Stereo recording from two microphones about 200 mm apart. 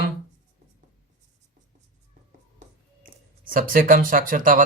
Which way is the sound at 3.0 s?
45° right (ahead or behind).